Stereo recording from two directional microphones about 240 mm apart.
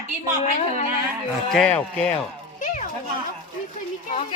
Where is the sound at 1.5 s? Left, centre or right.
Centre.